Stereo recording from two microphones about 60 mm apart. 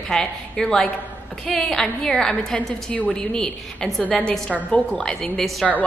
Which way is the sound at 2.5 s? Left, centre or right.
Left.